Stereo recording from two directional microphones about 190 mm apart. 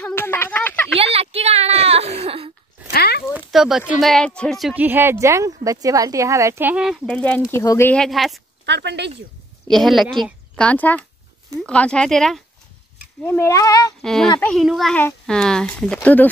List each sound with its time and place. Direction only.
0.0 s a sound: 10° left (ahead or behind)
0.9 s a sound: 30° right (ahead or behind)
2.9 s a sound: 55° left (ahead or behind)
3.3 s speech: centre (ahead or behind)
7.1 s speech: 5° left (ahead or behind)
8.6 s speech: 65° right (ahead or behind)
9.7 s a woman's voice: centre (ahead or behind)
13.2 s speech: 15° left (ahead or behind)
14.0 s speech: centre (ahead or behind)